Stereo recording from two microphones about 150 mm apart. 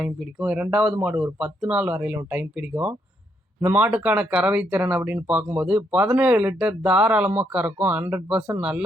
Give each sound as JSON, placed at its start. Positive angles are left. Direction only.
{"t": 0.0, "sound": "speech", "side_deg": -5}
{"t": 8.4, "sound": "speech", "side_deg": -25}